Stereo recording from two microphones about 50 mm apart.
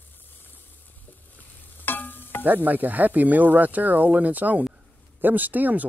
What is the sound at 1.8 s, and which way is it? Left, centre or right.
Stir, left.